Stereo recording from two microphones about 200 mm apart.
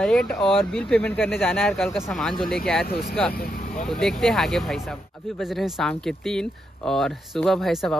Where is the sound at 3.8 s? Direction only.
Centre (ahead or behind).